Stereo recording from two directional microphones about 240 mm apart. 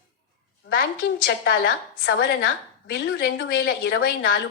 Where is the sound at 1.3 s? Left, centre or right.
Left.